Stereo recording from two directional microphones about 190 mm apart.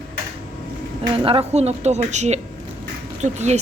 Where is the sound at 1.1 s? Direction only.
30° right (ahead or behind).